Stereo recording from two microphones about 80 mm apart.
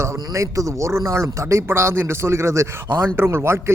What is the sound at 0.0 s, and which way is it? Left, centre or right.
A man's voice, right.